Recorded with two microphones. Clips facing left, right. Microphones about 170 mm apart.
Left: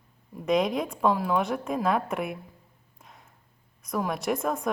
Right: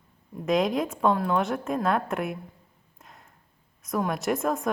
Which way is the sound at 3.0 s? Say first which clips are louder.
Right 1 dB; centre (ahead or behind).